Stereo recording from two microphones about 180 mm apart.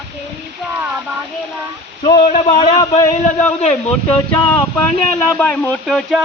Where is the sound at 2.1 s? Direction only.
30° left (ahead or behind).